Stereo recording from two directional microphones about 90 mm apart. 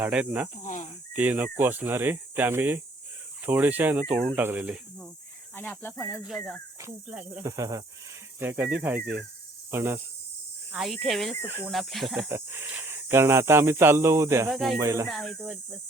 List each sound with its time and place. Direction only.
0.0 s speech: 15° right (ahead or behind)
5.5 s speech: 20° left (ahead or behind)
7.1 s speech: 15° right (ahead or behind)
7.4 s speech: 40° right (ahead or behind)
8.4 s speech: 20° right (ahead or behind)
10.7 s speech: centre (ahead or behind)
11.4 s speech: 25° right (ahead or behind)
11.7 s speech: centre (ahead or behind)
12.3 s speech: 25° right (ahead or behind)
14.5 s speech: centre (ahead or behind)
14.8 s speech: 35° right (ahead or behind)
15.0 s speech: centre (ahead or behind)